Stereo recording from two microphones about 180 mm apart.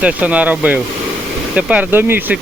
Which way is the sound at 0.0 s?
5° right (ahead or behind).